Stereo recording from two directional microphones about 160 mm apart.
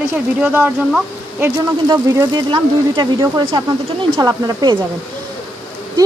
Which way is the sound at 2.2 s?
25° right (ahead or behind).